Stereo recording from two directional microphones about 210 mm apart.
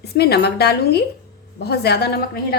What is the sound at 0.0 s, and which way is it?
A woman's voice, 50° left (ahead or behind).